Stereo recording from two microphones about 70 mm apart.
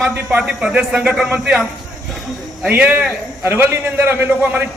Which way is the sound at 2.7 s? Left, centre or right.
Centre.